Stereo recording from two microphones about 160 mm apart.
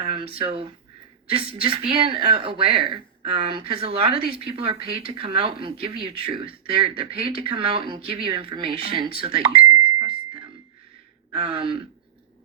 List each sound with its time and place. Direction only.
0.1 s speech: 35° right (ahead or behind)